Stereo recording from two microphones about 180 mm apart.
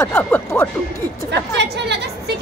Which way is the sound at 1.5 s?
70° right (ahead or behind).